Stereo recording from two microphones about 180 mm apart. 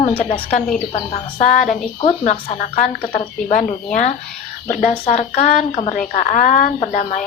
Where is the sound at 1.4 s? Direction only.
45° left (ahead or behind).